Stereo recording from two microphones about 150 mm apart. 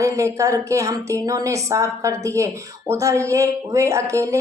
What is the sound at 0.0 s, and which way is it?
Speech, 20° right (ahead or behind).